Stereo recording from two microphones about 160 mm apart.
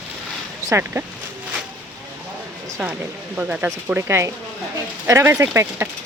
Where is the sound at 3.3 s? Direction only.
10° right (ahead or behind).